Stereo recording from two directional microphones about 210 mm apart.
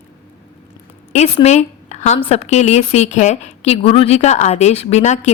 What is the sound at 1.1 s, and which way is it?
A woman's voice, 30° left (ahead or behind).